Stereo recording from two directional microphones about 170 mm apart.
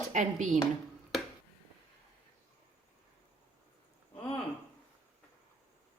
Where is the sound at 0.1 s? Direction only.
45° right (ahead or behind).